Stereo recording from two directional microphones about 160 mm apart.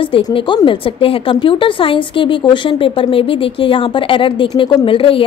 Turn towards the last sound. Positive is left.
turn(degrees=35)  # may be behind; listen again after turning